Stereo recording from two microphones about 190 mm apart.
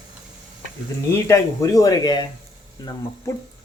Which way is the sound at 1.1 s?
15° left (ahead or behind).